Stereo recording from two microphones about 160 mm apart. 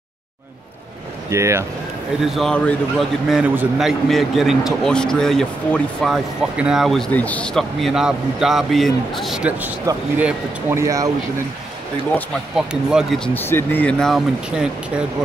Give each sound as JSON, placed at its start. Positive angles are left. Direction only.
{"t": 1.3, "sound": "speech", "side_deg": -15}
{"t": 2.3, "sound": "a man's voice", "side_deg": 5}
{"t": 12.5, "sound": "a man's voice", "side_deg": 0}
{"t": 13.3, "sound": "speech", "side_deg": 15}